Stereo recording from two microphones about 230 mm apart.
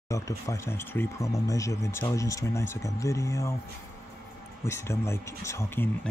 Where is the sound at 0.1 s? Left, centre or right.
Centre.